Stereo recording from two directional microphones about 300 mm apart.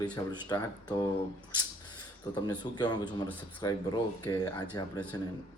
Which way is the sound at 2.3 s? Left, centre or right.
Centre.